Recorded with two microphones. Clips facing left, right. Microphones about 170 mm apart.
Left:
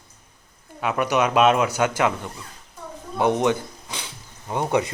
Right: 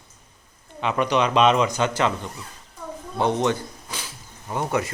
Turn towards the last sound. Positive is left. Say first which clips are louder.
# left 2 dB
turn(degrees=20)  # may be behind; listen again after turning